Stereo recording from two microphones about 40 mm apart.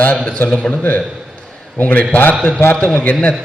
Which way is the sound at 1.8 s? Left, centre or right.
Left.